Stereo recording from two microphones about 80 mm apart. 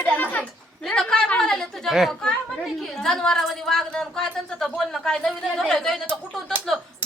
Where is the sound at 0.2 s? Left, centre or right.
Left; by 2.0 s centre.